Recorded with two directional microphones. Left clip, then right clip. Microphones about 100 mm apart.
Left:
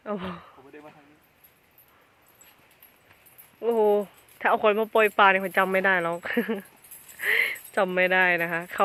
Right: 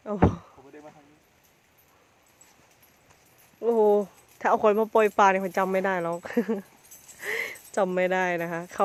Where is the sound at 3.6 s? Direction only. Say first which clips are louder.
Right 1 dB; 45° right (ahead or behind).